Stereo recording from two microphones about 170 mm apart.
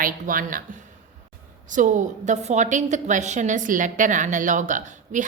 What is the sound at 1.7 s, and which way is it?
A woman's voice, 50° right (ahead or behind).